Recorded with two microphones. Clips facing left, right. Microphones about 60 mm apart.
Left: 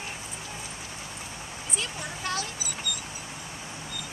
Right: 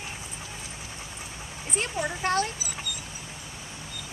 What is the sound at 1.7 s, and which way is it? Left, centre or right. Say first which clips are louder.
Speech: right 7 dB; right.